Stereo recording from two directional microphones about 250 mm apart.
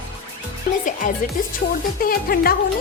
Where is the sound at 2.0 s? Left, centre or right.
Left.